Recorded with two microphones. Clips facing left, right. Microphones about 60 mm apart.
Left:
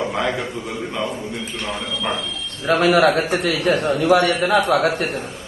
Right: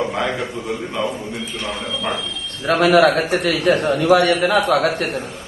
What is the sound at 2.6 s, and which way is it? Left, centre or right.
A man's voice, right.